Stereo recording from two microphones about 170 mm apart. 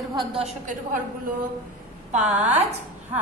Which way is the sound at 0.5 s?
50° right (ahead or behind).